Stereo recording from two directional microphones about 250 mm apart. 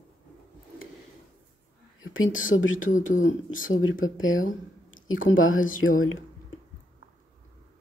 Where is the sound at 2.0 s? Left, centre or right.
Left.